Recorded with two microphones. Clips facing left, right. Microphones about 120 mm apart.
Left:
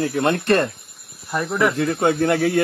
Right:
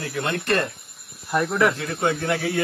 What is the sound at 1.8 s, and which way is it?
Speech, 45° left (ahead or behind).